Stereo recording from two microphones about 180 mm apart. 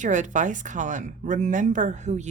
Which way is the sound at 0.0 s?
45° right (ahead or behind).